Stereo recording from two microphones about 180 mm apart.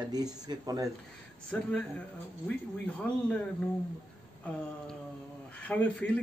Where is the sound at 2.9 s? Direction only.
5° left (ahead or behind).